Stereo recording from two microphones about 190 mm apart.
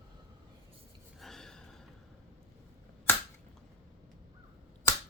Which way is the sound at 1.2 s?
Centre (ahead or behind).